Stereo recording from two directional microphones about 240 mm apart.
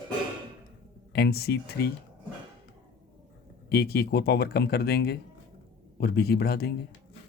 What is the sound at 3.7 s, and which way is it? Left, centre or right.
Speech, left.